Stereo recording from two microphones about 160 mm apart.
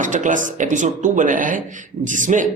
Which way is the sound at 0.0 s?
55° right (ahead or behind).